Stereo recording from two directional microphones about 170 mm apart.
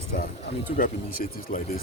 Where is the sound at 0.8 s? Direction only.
55° left (ahead or behind).